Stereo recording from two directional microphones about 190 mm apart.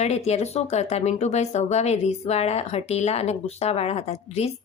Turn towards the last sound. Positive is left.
turn(degrees=35)  # may be behind; listen again after turning